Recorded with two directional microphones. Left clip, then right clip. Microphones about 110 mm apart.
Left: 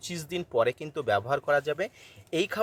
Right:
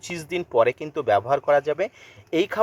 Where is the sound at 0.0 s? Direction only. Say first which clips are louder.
Right 6 dB; 15° left (ahead or behind).